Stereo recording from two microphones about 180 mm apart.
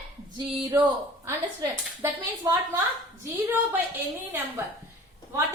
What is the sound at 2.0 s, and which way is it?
A woman's voice, 15° right (ahead or behind).